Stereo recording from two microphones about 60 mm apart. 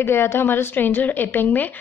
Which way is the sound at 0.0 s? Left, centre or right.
Left.